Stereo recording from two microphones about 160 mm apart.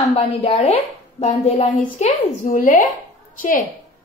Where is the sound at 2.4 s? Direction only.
55° left (ahead or behind).